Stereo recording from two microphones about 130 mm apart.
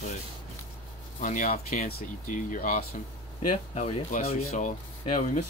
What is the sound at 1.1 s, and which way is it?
Speech, 90° left.